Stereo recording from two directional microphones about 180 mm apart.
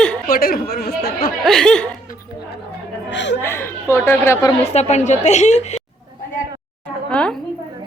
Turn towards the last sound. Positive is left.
turn(degrees=5)  # may be behind; listen again after turning